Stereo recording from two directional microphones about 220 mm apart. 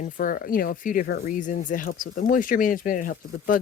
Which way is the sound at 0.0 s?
40° left (ahead or behind).